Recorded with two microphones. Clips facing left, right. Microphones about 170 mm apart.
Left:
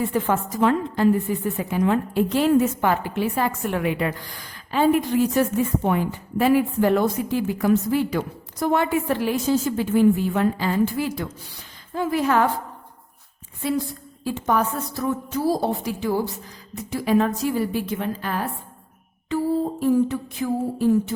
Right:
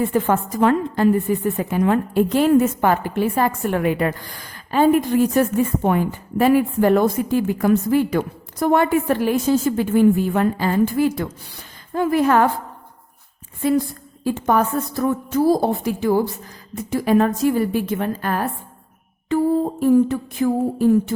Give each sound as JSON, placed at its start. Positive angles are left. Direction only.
{"t": 0.0, "sound": "a woman's voice", "side_deg": -50}
{"t": 14.3, "sound": "a woman's voice", "side_deg": -50}
{"t": 19.8, "sound": "a woman's voice", "side_deg": -50}